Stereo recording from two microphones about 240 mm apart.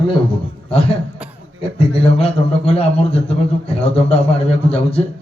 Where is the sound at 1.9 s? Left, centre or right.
Left.